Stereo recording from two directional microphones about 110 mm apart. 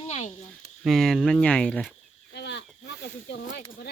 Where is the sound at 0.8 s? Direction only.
Centre (ahead or behind).